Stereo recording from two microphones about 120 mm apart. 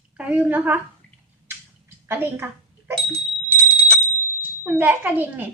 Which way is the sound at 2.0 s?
15° right (ahead or behind).